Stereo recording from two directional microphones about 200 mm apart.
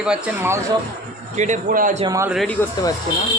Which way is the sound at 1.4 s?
40° right (ahead or behind).